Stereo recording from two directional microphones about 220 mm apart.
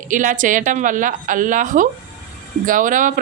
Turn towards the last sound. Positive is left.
turn(degrees=-35)  # may be behind; listen again after turning